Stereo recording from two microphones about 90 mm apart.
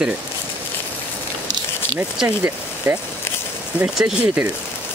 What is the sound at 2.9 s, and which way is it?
Speech, 30° right (ahead or behind).